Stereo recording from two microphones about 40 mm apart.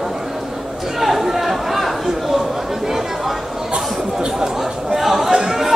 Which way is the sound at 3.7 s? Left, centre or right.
Right.